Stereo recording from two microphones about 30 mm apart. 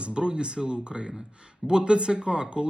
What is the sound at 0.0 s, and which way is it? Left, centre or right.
A man's voice, right.